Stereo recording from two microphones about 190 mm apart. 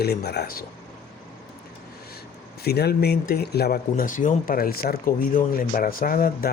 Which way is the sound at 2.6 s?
60° left (ahead or behind).